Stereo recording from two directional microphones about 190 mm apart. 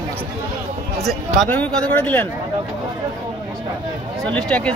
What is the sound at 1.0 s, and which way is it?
Speech, 5° left (ahead or behind).